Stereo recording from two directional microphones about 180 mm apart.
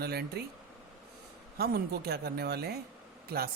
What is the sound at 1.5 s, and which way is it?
Speech, 60° right (ahead or behind).